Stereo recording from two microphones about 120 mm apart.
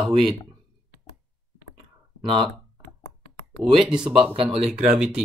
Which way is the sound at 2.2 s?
45° right (ahead or behind).